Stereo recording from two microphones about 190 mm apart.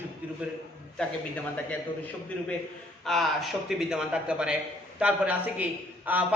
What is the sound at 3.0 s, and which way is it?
A woman's voice, centre (ahead or behind).